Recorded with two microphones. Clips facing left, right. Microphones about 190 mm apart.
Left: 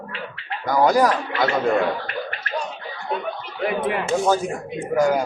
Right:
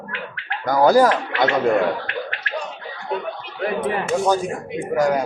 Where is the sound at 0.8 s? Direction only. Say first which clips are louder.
Right 4 dB; 30° right (ahead or behind).